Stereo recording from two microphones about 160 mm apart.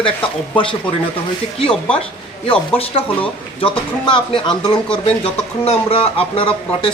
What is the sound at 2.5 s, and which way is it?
Speech, 35° left (ahead or behind).